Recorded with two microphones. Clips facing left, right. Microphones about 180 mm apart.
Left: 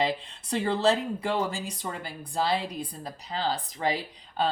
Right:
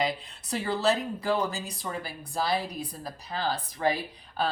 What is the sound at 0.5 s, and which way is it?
Speech, 30° left (ahead or behind).